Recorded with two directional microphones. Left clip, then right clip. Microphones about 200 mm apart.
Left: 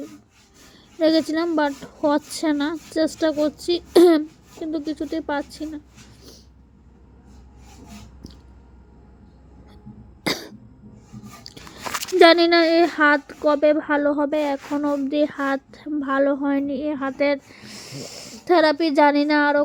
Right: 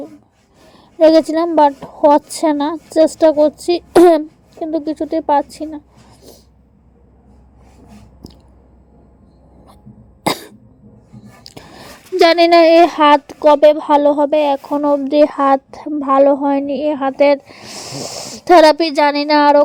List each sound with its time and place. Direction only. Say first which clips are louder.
0.7 s a woman's voice: right 10 dB; 15° right (ahead or behind)
10.2 s cough: right 7 dB; 15° right (ahead or behind)
11.4 s biting: left 2 dB; 15° right (ahead or behind)
12.5 s speech: right 9 dB; 35° right (ahead or behind)
14.0 s speech: right 9 dB; 15° right (ahead or behind)